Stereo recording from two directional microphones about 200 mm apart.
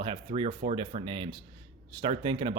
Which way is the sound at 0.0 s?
25° right (ahead or behind).